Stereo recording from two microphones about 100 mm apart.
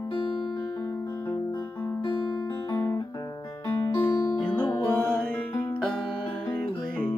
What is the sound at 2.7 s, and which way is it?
Guitar, 25° left (ahead or behind).